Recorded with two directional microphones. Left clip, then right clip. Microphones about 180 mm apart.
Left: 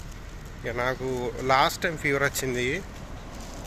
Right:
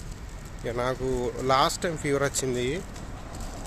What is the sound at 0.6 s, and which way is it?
Speech, 25° right (ahead or behind).